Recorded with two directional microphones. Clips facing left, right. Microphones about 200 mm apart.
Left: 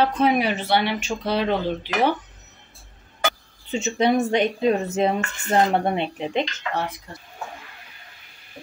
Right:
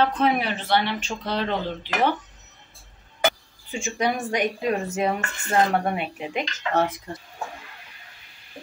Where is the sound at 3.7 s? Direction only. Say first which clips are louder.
Left 6 dB; 25° left (ahead or behind).